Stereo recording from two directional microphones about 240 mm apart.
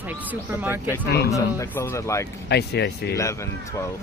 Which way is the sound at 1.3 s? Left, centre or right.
Centre.